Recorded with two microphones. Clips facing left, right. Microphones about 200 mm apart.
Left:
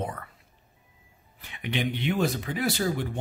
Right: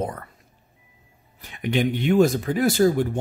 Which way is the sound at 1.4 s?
45° right (ahead or behind).